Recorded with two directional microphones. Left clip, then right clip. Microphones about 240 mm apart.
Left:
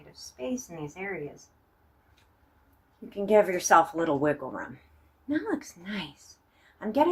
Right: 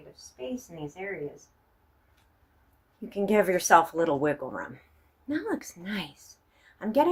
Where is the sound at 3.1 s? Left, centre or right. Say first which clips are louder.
Left 2 dB; right.